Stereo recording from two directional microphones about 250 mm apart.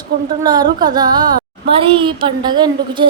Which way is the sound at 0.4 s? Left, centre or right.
Centre.